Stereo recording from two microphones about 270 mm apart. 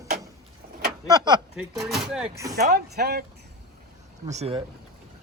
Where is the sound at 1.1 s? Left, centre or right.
Centre.